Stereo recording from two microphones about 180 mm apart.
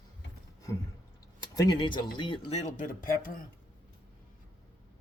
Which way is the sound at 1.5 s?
25° left (ahead or behind).